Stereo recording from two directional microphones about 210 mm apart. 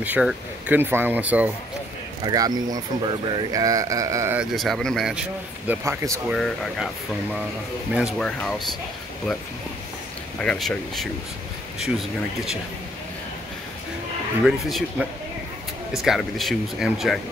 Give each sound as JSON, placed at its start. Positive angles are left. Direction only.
{"t": 0.0, "sound": "speech", "side_deg": -5}
{"t": 2.2, "sound": "speech", "side_deg": -20}
{"t": 5.7, "sound": "speech", "side_deg": -15}
{"t": 6.3, "sound": "speech", "side_deg": 0}
{"t": 7.9, "sound": "speech", "side_deg": 0}
{"t": 10.4, "sound": "speech", "side_deg": 5}
{"t": 14.4, "sound": "speech", "side_deg": 0}